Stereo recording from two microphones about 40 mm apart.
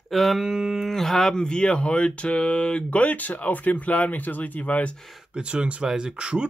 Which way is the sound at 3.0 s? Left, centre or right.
Left.